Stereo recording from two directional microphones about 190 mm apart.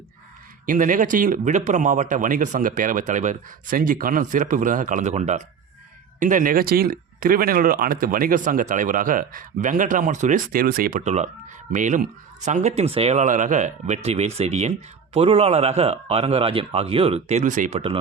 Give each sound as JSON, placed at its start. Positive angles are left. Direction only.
{"t": 0.6, "sound": "a man's voice", "side_deg": -45}